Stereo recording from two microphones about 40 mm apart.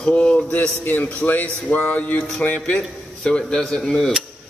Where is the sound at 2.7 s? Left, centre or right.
Left.